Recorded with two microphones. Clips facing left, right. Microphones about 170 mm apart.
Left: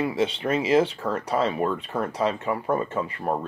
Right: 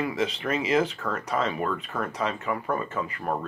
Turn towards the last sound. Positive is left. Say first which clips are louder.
# left 3 dB
turn(degrees=30)  # may be behind; listen again after turning